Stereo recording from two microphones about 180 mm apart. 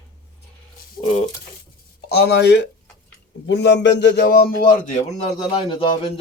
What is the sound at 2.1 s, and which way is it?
A man's voice, 65° left (ahead or behind).